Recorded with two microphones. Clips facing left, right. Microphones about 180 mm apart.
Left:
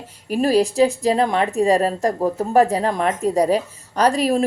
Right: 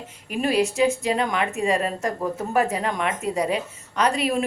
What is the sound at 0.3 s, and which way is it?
Speech, 35° left (ahead or behind).